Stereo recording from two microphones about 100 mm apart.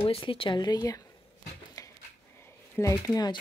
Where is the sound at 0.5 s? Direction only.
45° left (ahead or behind).